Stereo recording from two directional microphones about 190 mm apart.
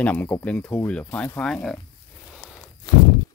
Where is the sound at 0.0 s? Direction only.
10° left (ahead or behind).